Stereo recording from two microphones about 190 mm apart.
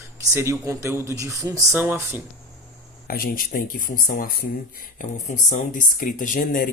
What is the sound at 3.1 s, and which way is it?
Speech, 50° left (ahead or behind).